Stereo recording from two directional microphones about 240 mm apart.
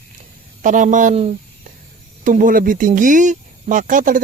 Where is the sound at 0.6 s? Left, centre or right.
Right.